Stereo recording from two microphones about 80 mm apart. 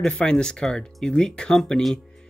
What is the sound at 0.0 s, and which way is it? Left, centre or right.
Speech, centre.